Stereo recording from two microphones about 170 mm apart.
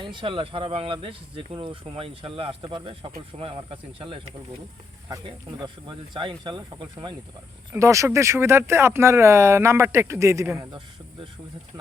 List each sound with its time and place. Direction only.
0.0 s speech: 30° right (ahead or behind)
5.0 s speech: 20° right (ahead or behind)
7.7 s speech: 15° right (ahead or behind)